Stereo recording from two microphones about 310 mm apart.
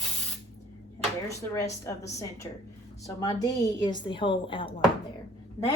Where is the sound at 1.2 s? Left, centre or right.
Centre.